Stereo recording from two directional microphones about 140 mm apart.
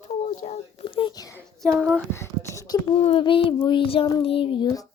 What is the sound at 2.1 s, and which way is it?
Speech, 20° left (ahead or behind).